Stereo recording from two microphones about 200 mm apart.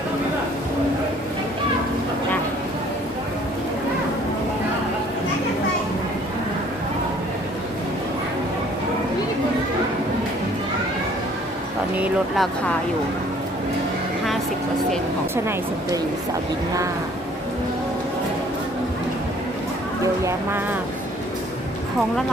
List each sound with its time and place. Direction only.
11.9 s speech: 5° right (ahead or behind)